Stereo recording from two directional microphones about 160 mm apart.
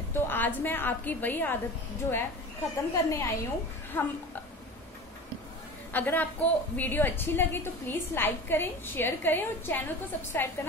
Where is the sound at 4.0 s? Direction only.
10° left (ahead or behind).